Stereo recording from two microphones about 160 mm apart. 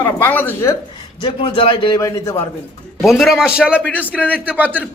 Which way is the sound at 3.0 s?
Centre (ahead or behind).